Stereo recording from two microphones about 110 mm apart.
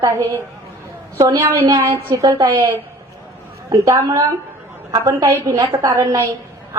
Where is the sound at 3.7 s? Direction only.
35° right (ahead or behind).